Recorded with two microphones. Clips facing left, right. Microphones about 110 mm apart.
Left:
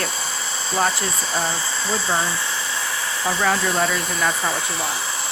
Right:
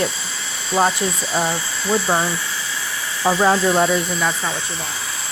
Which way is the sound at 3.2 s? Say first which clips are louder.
Right 6 dB; 30° right (ahead or behind).